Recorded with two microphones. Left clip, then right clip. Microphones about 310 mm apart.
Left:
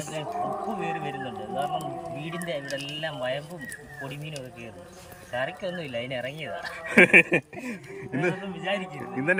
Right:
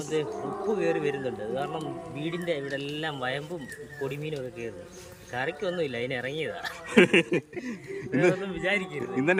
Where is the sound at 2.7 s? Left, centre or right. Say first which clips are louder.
Even; centre.